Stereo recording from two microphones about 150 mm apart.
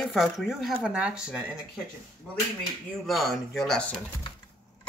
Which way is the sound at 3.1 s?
Centre (ahead or behind).